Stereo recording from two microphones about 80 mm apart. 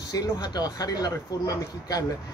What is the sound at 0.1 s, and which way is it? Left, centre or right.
Speech, left.